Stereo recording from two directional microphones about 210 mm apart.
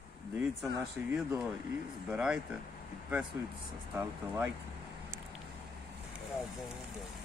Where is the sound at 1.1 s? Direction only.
5° right (ahead or behind).